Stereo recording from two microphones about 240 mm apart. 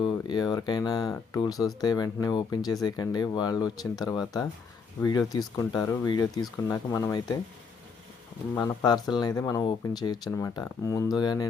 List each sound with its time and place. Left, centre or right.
0.0 s speech: centre
8.5 s speech: centre